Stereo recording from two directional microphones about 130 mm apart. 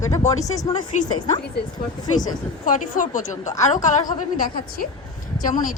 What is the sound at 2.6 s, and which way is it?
A woman's voice, 85° left.